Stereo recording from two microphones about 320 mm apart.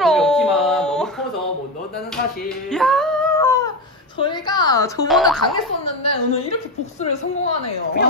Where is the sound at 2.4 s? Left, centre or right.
Centre.